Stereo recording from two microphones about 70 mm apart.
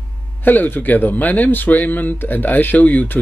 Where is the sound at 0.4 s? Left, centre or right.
Left.